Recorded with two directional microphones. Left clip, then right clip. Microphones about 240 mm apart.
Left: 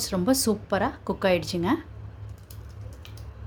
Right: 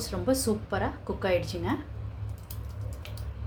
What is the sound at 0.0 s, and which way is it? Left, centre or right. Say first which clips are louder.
A woman's voice: left 3 dB; left.